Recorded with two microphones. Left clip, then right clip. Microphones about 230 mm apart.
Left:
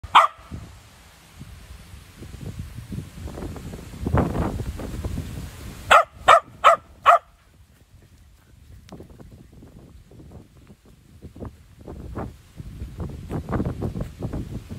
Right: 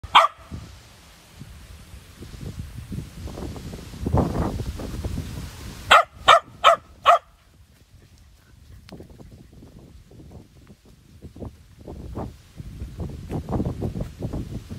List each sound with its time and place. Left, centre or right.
0.1 s dog: centre
3.3 s a sound: right
5.9 s dog: centre
8.9 s boat: centre
11.3 s vehicle: right
12.9 s a sound: right